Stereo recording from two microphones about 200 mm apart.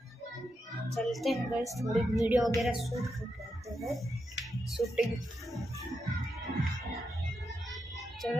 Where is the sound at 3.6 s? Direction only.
15° right (ahead or behind).